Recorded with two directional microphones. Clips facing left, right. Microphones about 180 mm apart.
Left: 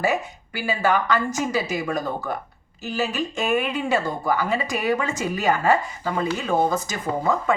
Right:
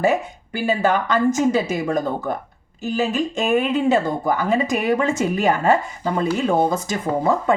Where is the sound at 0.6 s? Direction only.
20° right (ahead or behind).